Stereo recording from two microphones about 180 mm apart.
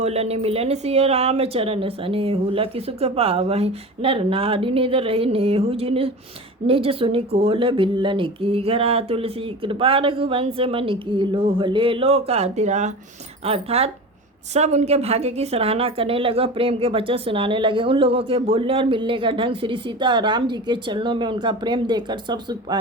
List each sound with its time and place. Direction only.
0.0 s a woman's voice: 35° right (ahead or behind)